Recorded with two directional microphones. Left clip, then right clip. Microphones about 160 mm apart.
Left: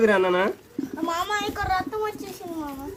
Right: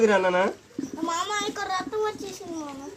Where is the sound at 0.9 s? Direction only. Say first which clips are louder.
Left 2 dB; 15° left (ahead or behind).